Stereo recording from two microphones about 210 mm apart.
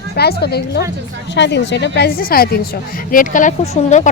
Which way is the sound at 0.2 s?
50° left (ahead or behind).